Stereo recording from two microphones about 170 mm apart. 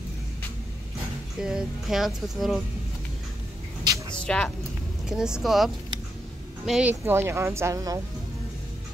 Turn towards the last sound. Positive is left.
turn(degrees=-20)  # may be behind; listen again after turning